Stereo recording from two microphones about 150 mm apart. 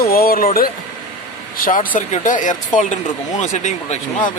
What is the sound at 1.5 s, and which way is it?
Speech, 65° left (ahead or behind).